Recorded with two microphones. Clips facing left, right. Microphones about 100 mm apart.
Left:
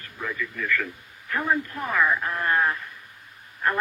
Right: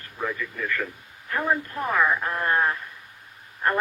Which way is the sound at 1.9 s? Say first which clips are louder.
Right 1 dB; 30° right (ahead or behind).